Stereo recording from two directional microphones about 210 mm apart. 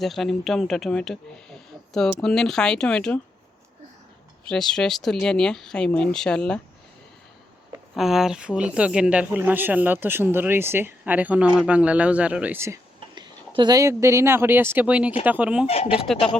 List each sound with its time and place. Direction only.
0.0 s speech: centre (ahead or behind)
2.2 s speech: centre (ahead or behind)
4.4 s speech: centre (ahead or behind)
7.9 s speech: centre (ahead or behind)
15.6 s speech: 30° left (ahead or behind)